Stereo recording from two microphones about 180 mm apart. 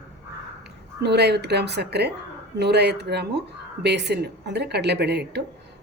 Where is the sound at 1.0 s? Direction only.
65° right (ahead or behind).